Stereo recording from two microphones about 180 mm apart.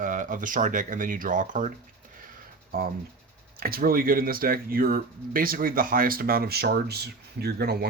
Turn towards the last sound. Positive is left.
turn(degrees=-65)  # may be behind; listen again after turning